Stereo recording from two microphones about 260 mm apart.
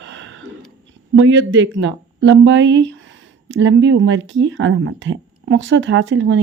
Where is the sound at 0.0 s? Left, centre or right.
Right.